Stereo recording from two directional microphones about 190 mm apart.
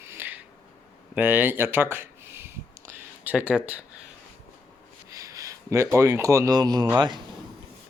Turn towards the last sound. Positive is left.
turn(degrees=-20)  # may be behind; listen again after turning